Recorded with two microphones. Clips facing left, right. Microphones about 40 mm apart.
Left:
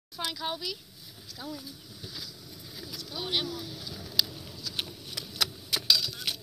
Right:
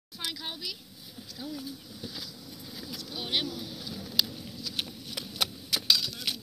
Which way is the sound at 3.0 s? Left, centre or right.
Right.